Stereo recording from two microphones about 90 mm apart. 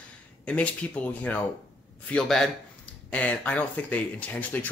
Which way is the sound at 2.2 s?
5° left (ahead or behind).